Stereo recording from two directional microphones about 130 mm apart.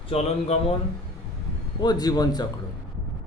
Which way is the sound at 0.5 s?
55° left (ahead or behind).